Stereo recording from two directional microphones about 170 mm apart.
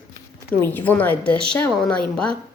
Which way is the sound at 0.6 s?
10° left (ahead or behind).